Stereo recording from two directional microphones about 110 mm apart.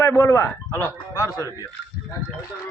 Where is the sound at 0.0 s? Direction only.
25° left (ahead or behind).